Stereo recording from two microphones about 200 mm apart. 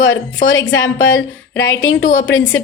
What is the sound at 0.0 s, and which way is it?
A woman's voice, 70° left (ahead or behind).